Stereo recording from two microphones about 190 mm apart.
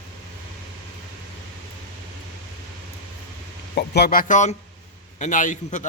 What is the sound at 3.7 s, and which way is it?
A man's voice, 55° left (ahead or behind).